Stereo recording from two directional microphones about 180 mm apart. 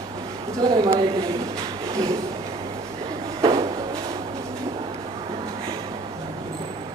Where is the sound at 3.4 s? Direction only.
25° right (ahead or behind).